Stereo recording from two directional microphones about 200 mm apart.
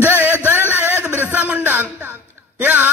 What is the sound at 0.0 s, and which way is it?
Music, 10° right (ahead or behind).